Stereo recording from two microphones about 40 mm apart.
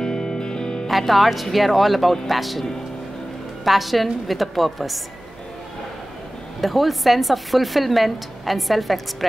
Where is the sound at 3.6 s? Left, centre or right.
Centre.